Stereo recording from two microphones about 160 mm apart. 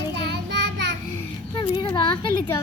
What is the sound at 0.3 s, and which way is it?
Child singing, 90° right.